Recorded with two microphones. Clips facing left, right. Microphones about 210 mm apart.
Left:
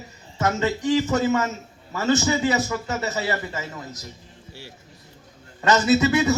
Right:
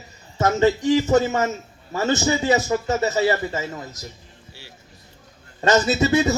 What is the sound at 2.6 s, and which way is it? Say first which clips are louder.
A man's voice: right 6 dB; 35° right (ahead or behind).